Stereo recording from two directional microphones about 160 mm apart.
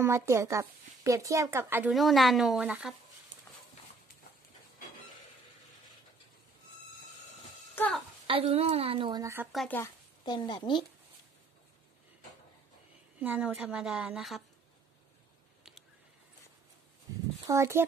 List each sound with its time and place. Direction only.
0.0 s speech: 15° right (ahead or behind)
1.9 s speech: centre (ahead or behind)
7.8 s a sound: 15° left (ahead or behind)
8.3 s a woman's voice: 40° right (ahead or behind)
9.2 s speech: 15° right (ahead or behind)
9.7 s a woman's voice: 10° left (ahead or behind)
10.2 s a woman's voice: 30° left (ahead or behind)
13.2 s speech: 10° right (ahead or behind)
17.5 s speech: 15° right (ahead or behind)